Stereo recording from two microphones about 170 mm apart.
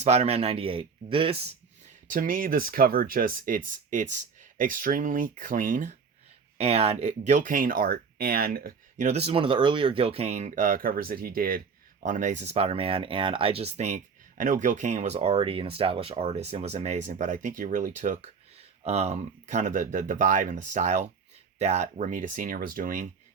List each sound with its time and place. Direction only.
0.0 s speech: 40° right (ahead or behind)
2.0 s speech: 55° right (ahead or behind)
6.6 s speech: 35° right (ahead or behind); by 8.7 s 60° right (ahead or behind)
9.0 s speech: 40° right (ahead or behind)